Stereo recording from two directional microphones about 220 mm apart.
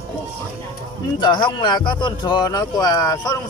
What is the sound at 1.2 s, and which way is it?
Speech, 20° left (ahead or behind).